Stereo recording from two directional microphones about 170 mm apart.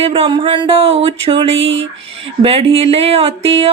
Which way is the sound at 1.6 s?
90° right.